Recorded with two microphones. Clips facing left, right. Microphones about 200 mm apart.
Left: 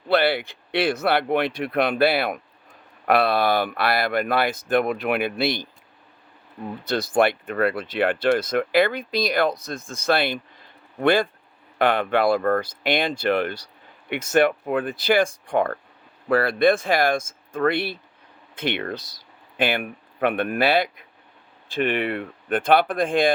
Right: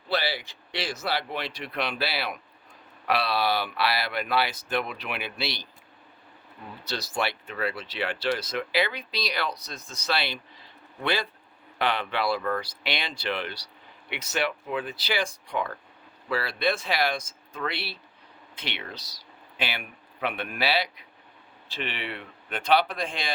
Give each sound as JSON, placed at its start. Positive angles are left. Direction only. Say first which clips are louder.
{"t": 0.1, "sound": "speech", "louder": "left 9 dB", "side_deg": 60}
{"t": 6.8, "sound": "speech", "louder": "left 10 dB", "side_deg": 55}